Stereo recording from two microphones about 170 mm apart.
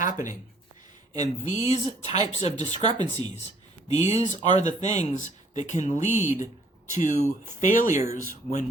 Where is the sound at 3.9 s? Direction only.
40° left (ahead or behind).